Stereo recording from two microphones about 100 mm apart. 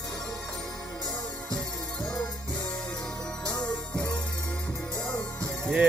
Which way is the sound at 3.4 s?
10° left (ahead or behind).